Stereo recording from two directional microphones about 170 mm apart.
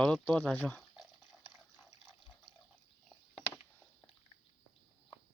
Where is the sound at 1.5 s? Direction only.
5° left (ahead or behind).